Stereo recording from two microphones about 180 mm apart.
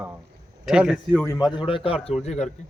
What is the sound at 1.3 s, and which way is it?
A man's voice, 25° left (ahead or behind).